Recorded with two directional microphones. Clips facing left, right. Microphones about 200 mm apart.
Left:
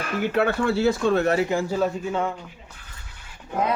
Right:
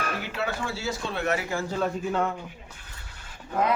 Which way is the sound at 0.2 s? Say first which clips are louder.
Left 9 dB; 55° left (ahead or behind).